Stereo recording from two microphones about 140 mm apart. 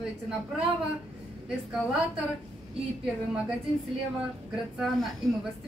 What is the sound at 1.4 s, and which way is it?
Speech, 5° right (ahead or behind).